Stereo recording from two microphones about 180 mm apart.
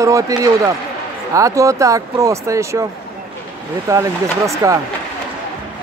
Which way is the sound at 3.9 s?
15° right (ahead or behind).